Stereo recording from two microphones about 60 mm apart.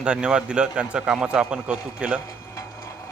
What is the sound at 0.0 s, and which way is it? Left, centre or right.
Speech, centre.